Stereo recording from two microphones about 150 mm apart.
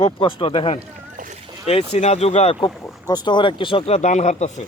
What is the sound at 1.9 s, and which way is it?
Speech, 45° left (ahead or behind).